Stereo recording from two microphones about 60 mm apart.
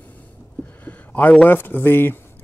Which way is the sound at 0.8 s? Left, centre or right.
Left.